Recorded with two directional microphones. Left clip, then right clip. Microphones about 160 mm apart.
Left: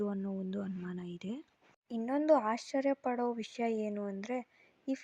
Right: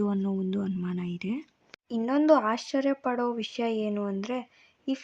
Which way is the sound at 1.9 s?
25° left (ahead or behind).